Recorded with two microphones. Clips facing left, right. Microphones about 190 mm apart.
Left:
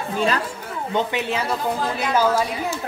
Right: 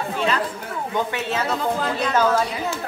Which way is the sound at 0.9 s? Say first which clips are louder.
Left 2 dB; 15° left (ahead or behind).